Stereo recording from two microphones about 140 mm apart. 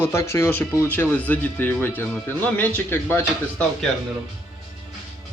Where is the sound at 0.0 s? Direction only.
20° left (ahead or behind).